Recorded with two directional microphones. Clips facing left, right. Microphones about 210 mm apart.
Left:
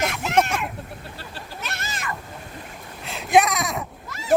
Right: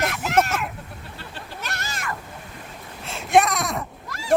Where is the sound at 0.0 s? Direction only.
Centre (ahead or behind).